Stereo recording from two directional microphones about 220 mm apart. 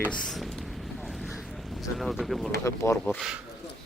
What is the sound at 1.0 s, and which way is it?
Boat, centre (ahead or behind).